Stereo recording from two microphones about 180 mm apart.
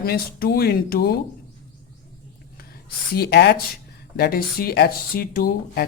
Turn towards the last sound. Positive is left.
turn(degrees=55)  # may be behind; listen again after turning